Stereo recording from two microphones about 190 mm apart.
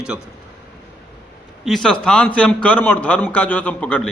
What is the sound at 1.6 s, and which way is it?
A man's voice, centre (ahead or behind).